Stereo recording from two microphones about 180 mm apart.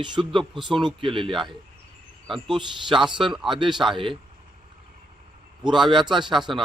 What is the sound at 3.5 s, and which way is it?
Speech, 25° right (ahead or behind).